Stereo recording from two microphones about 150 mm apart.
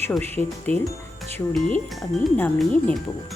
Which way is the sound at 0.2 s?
15° left (ahead or behind).